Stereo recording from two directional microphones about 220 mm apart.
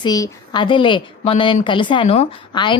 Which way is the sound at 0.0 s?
20° left (ahead or behind).